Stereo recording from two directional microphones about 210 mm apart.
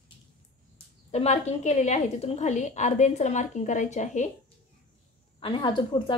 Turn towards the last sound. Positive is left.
turn(degrees=20)  # may be behind; listen again after turning